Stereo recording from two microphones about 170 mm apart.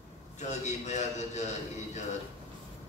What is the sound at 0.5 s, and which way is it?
Speech, 40° left (ahead or behind).